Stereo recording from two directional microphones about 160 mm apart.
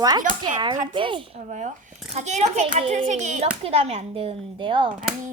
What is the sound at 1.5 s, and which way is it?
Speech, 50° right (ahead or behind).